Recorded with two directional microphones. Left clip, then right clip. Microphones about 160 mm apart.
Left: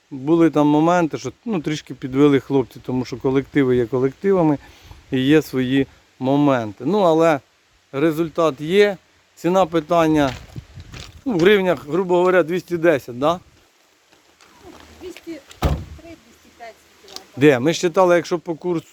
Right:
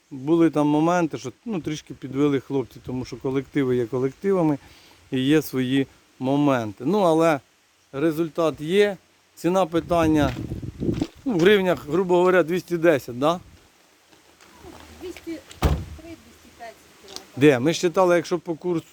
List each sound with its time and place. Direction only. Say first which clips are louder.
0.3 s speech: left 4 dB; 10° left (ahead or behind)
7.9 s speech: left 4 dB; 20° left (ahead or behind); by 13.4 s centre (ahead or behind)
16.6 s a sound: left 1 dB; 30° left (ahead or behind)
17.3 s speech: left 3 dB; 5° left (ahead or behind)